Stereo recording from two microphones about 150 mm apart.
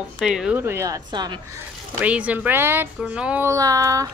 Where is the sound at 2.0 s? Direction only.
10° right (ahead or behind).